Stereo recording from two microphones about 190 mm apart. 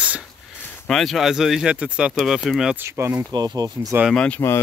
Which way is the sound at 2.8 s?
15° right (ahead or behind).